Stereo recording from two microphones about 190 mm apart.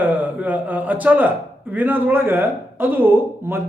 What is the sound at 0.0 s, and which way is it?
A man's voice, 10° right (ahead or behind).